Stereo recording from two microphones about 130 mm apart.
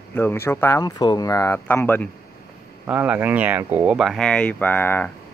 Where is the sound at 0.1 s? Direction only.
15° left (ahead or behind).